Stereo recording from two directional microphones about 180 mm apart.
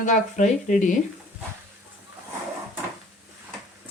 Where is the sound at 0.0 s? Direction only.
45° left (ahead or behind).